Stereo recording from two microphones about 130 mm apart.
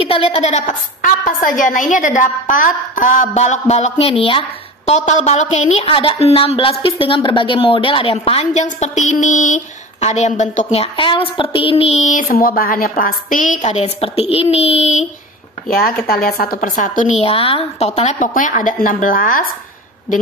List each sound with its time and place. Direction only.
0.0 s a woman's voice: 45° left (ahead or behind)
4.9 s a woman's voice: 60° left (ahead or behind)
16.2 s a woman's voice: 90° left
17.2 s a woman's voice: 45° left (ahead or behind); by 19.4 s 90° left